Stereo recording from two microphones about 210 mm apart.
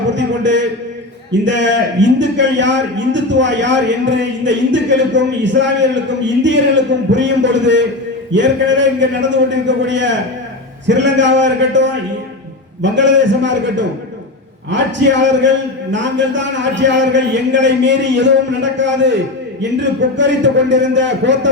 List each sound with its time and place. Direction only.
0.2 s a man's voice: 60° right (ahead or behind)